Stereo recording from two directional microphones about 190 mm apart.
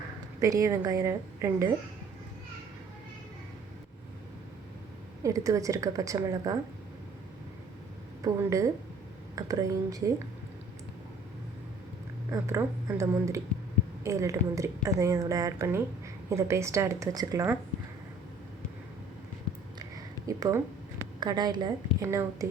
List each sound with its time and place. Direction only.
0.4 s a woman's voice: 15° right (ahead or behind)
5.2 s a woman's voice: 15° right (ahead or behind)
8.2 s a woman's voice: 15° right (ahead or behind)
12.3 s a woman's voice: 15° right (ahead or behind)
20.2 s a woman's voice: 15° right (ahead or behind)